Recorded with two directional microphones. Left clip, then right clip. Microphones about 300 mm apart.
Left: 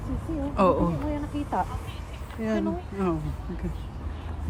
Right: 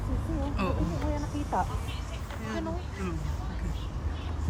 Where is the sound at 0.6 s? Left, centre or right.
Centre.